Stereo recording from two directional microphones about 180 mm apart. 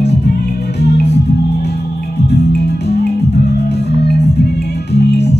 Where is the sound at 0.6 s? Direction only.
65° left (ahead or behind).